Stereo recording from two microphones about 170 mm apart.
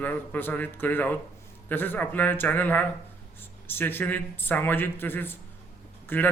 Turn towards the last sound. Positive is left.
turn(degrees=10)  # may be behind; listen again after turning